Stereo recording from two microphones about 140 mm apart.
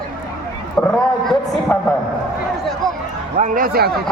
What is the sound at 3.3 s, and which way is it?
Speech, 75° right (ahead or behind).